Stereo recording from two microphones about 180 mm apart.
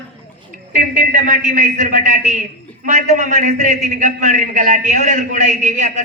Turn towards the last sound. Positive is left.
turn(degrees=-45)  # may be behind; listen again after turning